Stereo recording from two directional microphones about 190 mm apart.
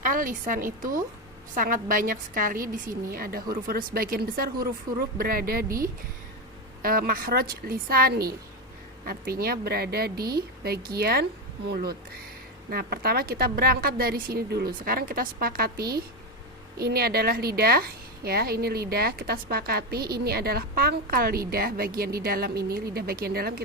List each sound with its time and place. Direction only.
0.0 s a woman's voice: 45° right (ahead or behind)